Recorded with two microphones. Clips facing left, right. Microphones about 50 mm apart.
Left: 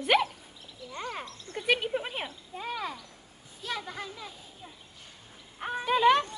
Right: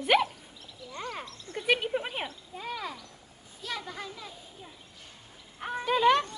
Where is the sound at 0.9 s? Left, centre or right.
Centre.